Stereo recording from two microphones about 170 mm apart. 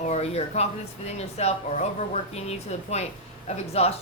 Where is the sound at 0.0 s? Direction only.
40° left (ahead or behind).